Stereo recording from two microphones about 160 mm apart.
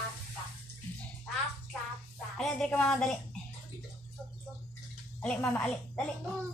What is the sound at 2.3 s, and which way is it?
Speech, 5° left (ahead or behind).